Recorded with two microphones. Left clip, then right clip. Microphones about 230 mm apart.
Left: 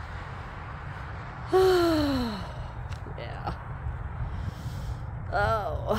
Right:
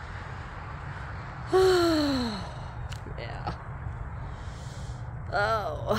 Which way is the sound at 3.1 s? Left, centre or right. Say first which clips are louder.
Left 1 dB; centre.